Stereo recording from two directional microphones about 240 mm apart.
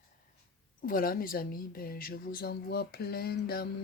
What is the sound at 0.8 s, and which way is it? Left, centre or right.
A woman's voice, left.